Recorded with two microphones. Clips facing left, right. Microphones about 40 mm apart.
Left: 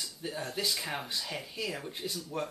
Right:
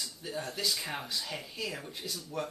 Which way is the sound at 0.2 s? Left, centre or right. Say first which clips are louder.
Left 2 dB; left.